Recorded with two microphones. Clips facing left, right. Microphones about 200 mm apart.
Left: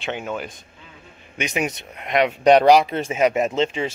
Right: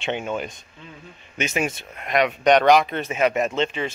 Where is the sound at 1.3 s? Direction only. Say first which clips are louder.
Even; 15° left (ahead or behind).